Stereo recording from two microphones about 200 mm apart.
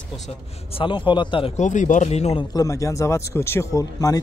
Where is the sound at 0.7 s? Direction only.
25° left (ahead or behind).